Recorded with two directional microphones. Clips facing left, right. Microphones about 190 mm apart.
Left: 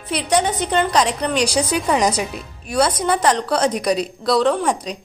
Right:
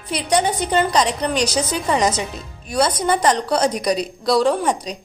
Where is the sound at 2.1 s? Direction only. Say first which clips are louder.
Left 2 dB; 10° left (ahead or behind).